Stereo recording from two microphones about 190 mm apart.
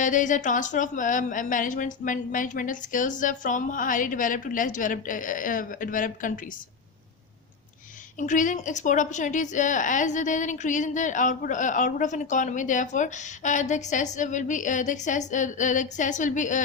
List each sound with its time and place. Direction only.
0.0 s a woman's voice: 40° left (ahead or behind)
8.2 s a woman's voice: 40° left (ahead or behind)